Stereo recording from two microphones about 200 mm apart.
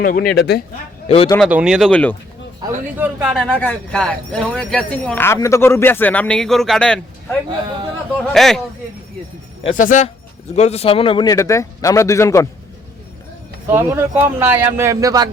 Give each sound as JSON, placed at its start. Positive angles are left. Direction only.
{"t": 0.0, "sound": "speech", "side_deg": 45}
{"t": 1.0, "sound": "speech", "side_deg": 30}
{"t": 1.4, "sound": "speech", "side_deg": -5}
{"t": 2.6, "sound": "speech", "side_deg": -20}
{"t": 3.0, "sound": "a man's voice", "side_deg": -5}
{"t": 3.4, "sound": "speech", "side_deg": 5}
{"t": 9.7, "sound": "a man's voice", "side_deg": 40}
{"t": 13.7, "sound": "a man's voice", "side_deg": -10}